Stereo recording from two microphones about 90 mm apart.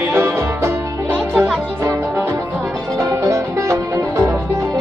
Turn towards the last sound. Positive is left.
turn(degrees=-35)  # may be behind; listen again after turning